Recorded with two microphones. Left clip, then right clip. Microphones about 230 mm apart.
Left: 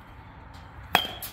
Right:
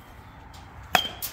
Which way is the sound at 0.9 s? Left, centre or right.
Centre.